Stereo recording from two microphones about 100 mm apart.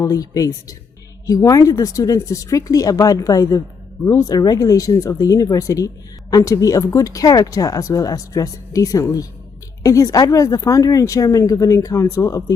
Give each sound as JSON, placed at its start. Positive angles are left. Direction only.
{"t": 0.0, "sound": "speech", "side_deg": 35}